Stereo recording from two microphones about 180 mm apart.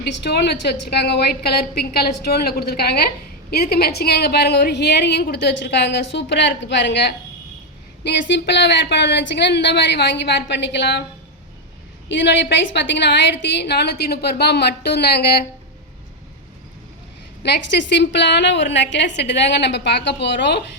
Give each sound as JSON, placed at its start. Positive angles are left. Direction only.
{"t": 0.0, "sound": "a woman's voice", "side_deg": 70}
{"t": 12.0, "sound": "a woman's voice", "side_deg": 80}
{"t": 17.4, "sound": "a woman's voice", "side_deg": 70}